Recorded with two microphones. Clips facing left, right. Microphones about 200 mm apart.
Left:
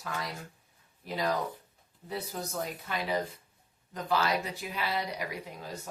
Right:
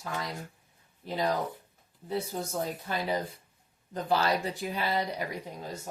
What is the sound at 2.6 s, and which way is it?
Speech, 30° right (ahead or behind).